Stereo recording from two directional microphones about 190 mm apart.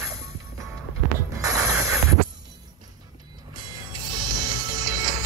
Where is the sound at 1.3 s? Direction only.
15° right (ahead or behind).